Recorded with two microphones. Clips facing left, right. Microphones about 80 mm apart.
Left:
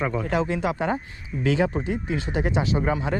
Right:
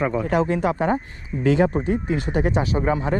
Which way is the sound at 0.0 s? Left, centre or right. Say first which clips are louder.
Right 4 dB; right.